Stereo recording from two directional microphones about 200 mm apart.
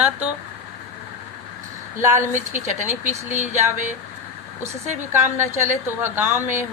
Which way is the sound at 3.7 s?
40° right (ahead or behind).